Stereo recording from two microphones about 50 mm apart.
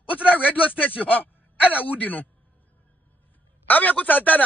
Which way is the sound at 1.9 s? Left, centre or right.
Left.